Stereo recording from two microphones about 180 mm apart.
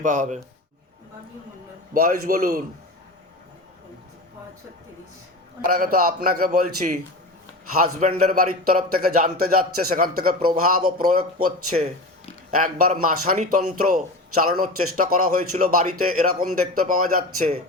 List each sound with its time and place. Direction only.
0.0 s a man's voice: 45° right (ahead or behind)
1.9 s a man's voice: 50° right (ahead or behind)
5.6 s a man's voice: 55° right (ahead or behind)